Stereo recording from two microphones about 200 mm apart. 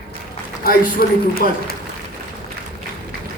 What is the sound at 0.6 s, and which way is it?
A man's voice, 50° left (ahead or behind).